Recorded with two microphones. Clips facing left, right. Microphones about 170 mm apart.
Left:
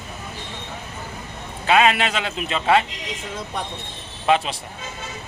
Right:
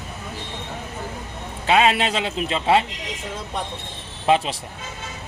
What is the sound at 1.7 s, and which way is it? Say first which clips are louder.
A man's voice: even; 25° right (ahead or behind).